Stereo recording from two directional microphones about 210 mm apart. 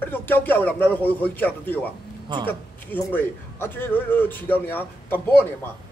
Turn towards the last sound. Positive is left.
turn(degrees=10)  # may be behind; listen again after turning